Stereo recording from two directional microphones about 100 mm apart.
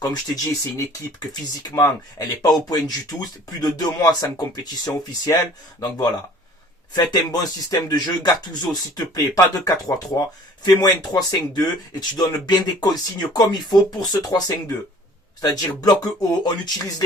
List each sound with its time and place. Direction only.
0.0 s speech: 40° left (ahead or behind)
6.9 s speech: 45° left (ahead or behind)